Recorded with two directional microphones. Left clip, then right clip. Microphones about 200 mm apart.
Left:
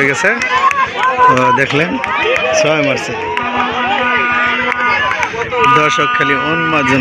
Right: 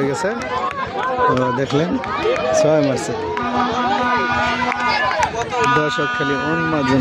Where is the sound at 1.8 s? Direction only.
60° right (ahead or behind).